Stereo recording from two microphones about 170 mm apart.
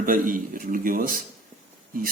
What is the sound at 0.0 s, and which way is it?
Speech, 55° right (ahead or behind).